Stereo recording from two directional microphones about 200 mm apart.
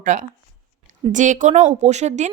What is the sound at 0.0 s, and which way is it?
Speech, 40° right (ahead or behind).